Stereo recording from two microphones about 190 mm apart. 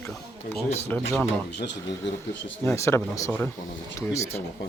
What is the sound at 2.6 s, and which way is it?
Speech, 15° left (ahead or behind).